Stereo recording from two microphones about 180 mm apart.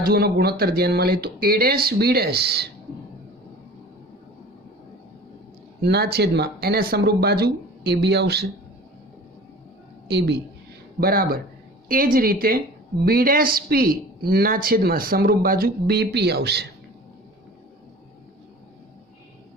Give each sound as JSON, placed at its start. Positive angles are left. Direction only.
{"t": 0.0, "sound": "speech", "side_deg": -60}
{"t": 5.8, "sound": "speech", "side_deg": -65}
{"t": 10.1, "sound": "a woman's voice", "side_deg": -65}
{"t": 11.0, "sound": "a woman's voice", "side_deg": -55}